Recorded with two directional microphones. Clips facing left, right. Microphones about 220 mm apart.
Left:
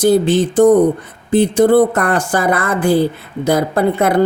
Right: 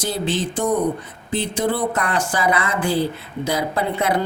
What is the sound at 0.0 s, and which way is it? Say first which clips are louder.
Speech: left 11 dB; 50° left (ahead or behind).